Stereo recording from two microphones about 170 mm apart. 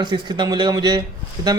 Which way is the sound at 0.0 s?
25° right (ahead or behind).